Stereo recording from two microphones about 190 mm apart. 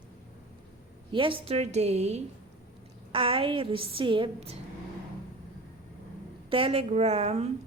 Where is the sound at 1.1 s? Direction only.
25° right (ahead or behind).